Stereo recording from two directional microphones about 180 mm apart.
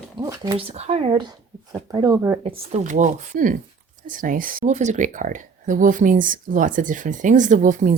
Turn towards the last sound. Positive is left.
turn(degrees=-45)  # may be behind; listen again after turning